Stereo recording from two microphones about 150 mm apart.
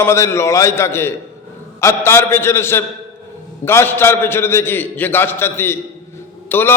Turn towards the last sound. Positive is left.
turn(degrees=15)  # may be behind; listen again after turning